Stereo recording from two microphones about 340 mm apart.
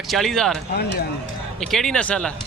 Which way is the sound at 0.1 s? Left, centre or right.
Centre.